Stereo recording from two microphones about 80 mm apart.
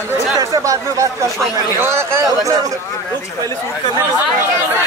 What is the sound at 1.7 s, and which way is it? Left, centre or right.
Speech, right.